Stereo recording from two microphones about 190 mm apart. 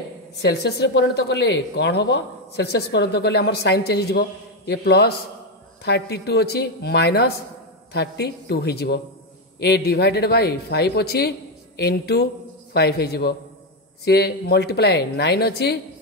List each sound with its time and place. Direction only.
0.4 s a woman's voice: 60° left (ahead or behind)